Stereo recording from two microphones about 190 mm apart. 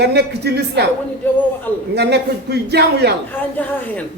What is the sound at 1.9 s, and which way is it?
A man's voice, 60° right (ahead or behind).